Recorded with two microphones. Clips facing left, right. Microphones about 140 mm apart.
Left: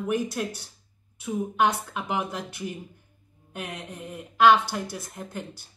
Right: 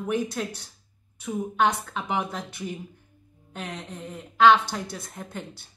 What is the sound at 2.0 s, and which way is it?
Speech, centre (ahead or behind).